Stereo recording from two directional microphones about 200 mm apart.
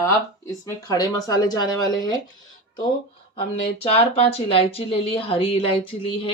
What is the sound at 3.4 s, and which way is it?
Speech, 30° left (ahead or behind).